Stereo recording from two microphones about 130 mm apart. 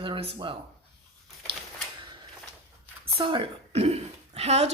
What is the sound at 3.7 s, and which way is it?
Speech, 55° right (ahead or behind).